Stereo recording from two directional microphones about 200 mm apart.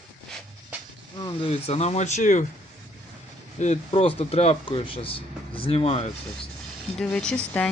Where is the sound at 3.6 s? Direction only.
30° left (ahead or behind).